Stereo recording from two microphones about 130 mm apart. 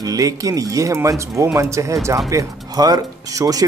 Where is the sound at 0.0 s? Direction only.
25° right (ahead or behind).